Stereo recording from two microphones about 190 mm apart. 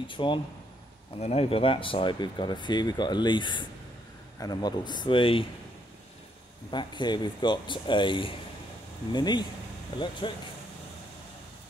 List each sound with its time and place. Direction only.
0.0 s speech: 25° left (ahead or behind)
6.7 s speech: 25° left (ahead or behind)